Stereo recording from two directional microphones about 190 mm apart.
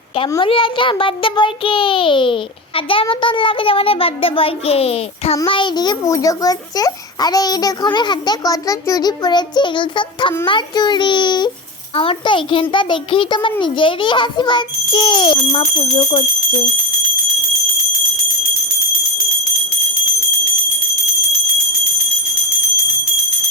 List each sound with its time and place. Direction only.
0.3 s a child's voice: 25° left (ahead or behind)